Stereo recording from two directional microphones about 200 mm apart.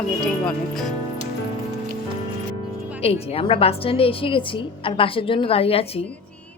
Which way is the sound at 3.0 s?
30° left (ahead or behind).